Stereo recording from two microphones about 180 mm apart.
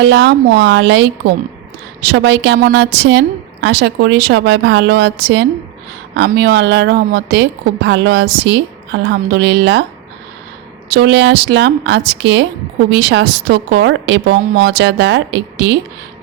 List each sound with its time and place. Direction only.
0.0 s a woman's voice: 80° right
2.1 s a woman's voice: 75° right (ahead or behind)
10.9 s a woman's voice: 75° right (ahead or behind)